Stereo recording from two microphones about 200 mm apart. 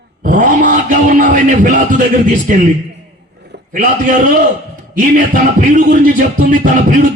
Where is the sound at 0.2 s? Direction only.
45° right (ahead or behind).